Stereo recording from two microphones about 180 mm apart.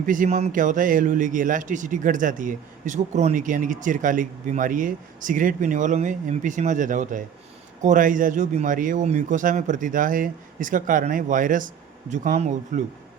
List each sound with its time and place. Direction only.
0.0 s a man's voice: 50° right (ahead or behind)